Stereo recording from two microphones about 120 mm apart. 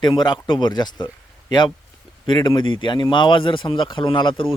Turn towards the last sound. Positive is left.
turn(degrees=45)  # may be behind; listen again after turning